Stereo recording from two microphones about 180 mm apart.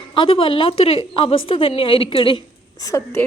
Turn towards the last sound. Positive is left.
turn(degrees=20)  # may be behind; listen again after turning